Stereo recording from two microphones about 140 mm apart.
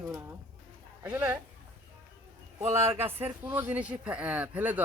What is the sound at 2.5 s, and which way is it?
Speech, 20° right (ahead or behind).